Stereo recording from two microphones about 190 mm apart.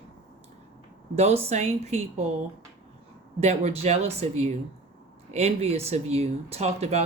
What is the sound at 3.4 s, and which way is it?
Speech, 35° right (ahead or behind).